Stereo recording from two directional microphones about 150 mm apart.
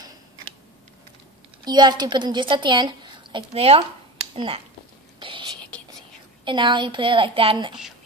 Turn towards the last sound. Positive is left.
turn(degrees=-35)  # may be behind; listen again after turning